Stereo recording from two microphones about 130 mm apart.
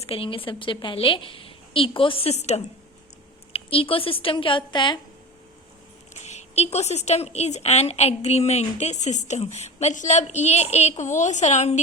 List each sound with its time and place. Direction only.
0.1 s a woman's voice: 45° left (ahead or behind)
3.5 s a woman's voice: 45° left (ahead or behind)
6.2 s a woman's voice: 55° left (ahead or behind)